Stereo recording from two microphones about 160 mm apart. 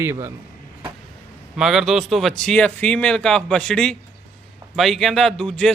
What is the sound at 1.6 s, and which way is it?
Speech, 5° right (ahead or behind).